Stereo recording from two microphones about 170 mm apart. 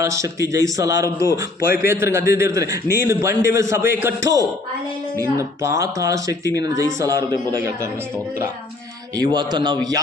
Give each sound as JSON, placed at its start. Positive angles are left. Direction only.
{"t": 0.0, "sound": "a man's voice", "side_deg": -20}
{"t": 9.1, "sound": "a man's voice", "side_deg": -25}